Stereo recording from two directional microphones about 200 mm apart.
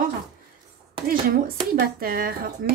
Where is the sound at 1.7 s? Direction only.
45° right (ahead or behind).